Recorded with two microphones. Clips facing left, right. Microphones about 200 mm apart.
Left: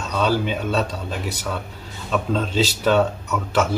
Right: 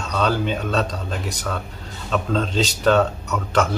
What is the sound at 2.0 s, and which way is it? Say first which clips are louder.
A man's voice: even; 5° left (ahead or behind).